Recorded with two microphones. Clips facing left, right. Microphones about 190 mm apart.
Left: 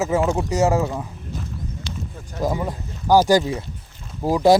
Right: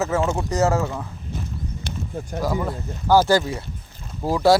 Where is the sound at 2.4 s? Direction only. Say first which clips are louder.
Left 1 dB; 20° left (ahead or behind).